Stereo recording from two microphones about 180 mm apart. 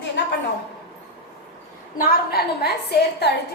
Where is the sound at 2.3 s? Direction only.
60° left (ahead or behind).